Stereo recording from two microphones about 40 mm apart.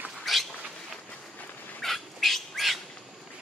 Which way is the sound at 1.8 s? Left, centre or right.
Centre.